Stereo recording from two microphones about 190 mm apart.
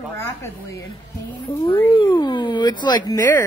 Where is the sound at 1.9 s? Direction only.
25° left (ahead or behind).